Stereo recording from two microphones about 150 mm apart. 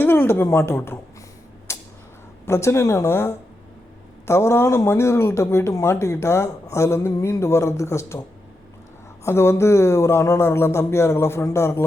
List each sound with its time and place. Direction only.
0.0 s speech: 15° left (ahead or behind)
1.7 s a sound: 20° left (ahead or behind)
2.5 s speech: 20° left (ahead or behind)
9.2 s speech: 15° left (ahead or behind)